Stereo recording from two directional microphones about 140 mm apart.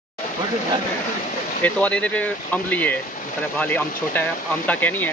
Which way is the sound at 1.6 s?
10° left (ahead or behind).